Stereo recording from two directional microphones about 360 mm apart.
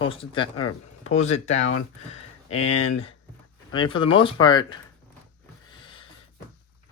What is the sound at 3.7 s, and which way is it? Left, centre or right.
Speech, centre.